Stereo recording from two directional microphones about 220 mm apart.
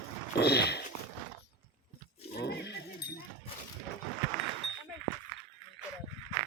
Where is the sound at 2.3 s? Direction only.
50° left (ahead or behind).